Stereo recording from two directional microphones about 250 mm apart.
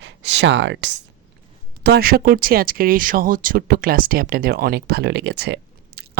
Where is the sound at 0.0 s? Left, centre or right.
Right.